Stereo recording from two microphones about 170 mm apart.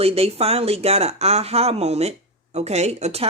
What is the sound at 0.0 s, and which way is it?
Speech, 35° right (ahead or behind).